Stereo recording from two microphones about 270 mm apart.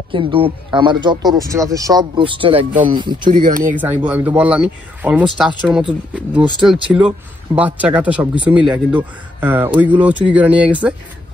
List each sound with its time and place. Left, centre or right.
0.1 s speech: centre
3.3 s speech: right
4.0 s speech: centre